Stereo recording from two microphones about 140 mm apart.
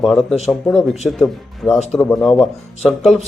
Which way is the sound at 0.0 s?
Centre (ahead or behind).